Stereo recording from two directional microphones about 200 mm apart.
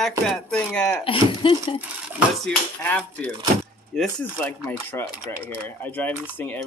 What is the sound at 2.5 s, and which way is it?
Speech, 5° left (ahead or behind).